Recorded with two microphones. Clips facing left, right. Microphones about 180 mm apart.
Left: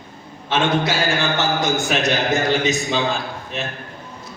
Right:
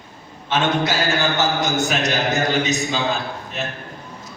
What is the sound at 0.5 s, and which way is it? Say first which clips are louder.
A man's voice: left 1 dB; 40° right (ahead or behind).